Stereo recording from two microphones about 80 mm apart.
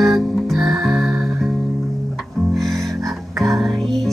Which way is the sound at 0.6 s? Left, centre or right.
Right.